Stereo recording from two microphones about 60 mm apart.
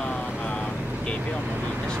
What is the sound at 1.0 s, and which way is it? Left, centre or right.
Speech, centre.